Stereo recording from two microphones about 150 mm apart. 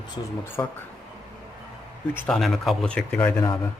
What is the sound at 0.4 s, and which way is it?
Speech, 15° left (ahead or behind).